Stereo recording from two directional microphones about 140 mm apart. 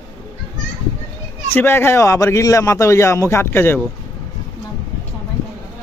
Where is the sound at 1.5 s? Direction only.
15° left (ahead or behind).